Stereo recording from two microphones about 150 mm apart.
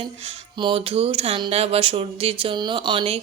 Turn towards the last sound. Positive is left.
turn(degrees=-35)  # may be behind; listen again after turning